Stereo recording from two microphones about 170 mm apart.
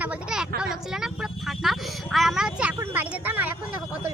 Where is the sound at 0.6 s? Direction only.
Centre (ahead or behind).